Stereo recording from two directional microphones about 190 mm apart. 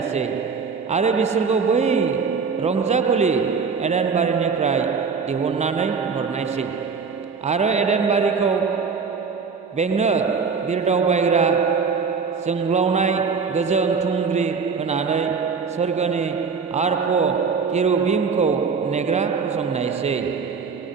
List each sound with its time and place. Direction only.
0.9 s a man's voice: 35° right (ahead or behind)
9.7 s a man's voice: 35° right (ahead or behind)